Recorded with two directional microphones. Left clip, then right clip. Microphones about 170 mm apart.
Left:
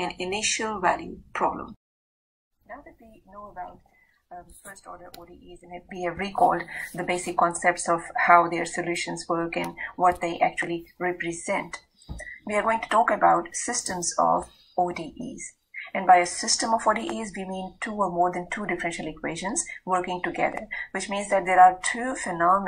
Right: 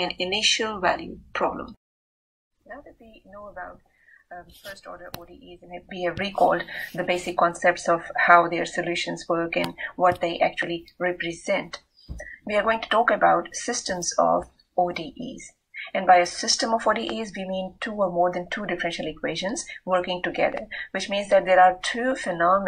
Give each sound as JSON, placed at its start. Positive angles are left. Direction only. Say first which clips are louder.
{"t": 0.0, "sound": "a woman's voice", "louder": "right 5 dB", "side_deg": -50}
{"t": 15.0, "sound": "speech", "louder": "right 2 dB", "side_deg": -45}